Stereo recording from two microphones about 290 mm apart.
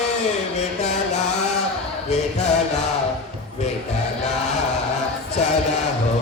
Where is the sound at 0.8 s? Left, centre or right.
Left.